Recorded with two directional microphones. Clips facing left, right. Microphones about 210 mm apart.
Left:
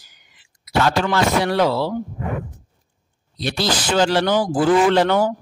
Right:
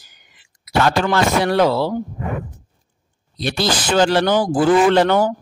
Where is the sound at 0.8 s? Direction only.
55° right (ahead or behind).